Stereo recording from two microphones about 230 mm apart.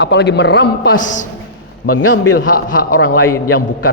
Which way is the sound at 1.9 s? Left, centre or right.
Left.